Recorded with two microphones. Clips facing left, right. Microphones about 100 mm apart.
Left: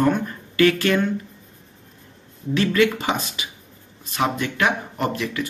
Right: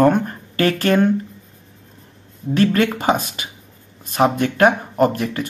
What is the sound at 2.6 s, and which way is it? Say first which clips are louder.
Speech: right 2 dB; 50° right (ahead or behind).